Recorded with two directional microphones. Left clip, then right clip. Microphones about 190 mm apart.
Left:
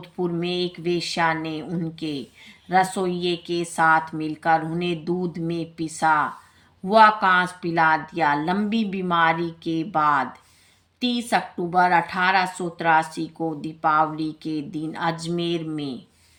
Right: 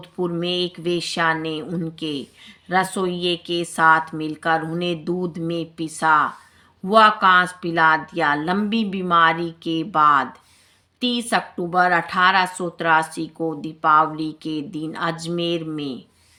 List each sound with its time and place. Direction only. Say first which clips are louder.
0.0 s a woman's voice: right 2 dB; 20° right (ahead or behind)